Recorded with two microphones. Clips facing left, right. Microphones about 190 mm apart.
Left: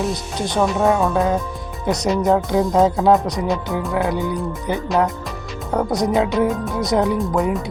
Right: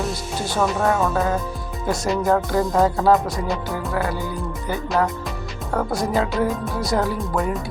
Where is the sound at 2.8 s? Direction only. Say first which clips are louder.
Left 3 dB; 20° left (ahead or behind).